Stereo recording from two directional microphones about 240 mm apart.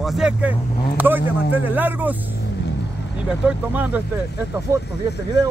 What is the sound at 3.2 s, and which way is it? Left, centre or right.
Speech, centre.